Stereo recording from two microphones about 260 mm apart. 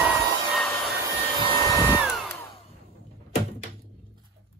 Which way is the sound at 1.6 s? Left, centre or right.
Centre.